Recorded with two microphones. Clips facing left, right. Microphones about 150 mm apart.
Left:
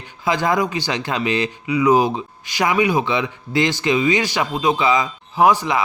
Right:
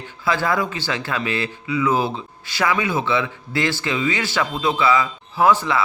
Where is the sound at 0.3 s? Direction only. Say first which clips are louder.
Left 2 dB; 15° left (ahead or behind).